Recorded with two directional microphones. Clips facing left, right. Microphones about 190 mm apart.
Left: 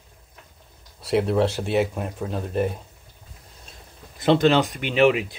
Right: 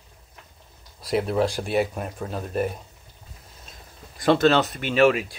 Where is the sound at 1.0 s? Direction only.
25° left (ahead or behind).